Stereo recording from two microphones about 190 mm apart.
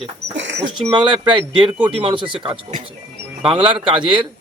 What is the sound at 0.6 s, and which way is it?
Speech, 25° right (ahead or behind).